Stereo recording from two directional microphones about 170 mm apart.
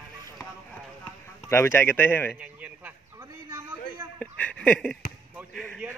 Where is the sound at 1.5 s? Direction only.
15° left (ahead or behind).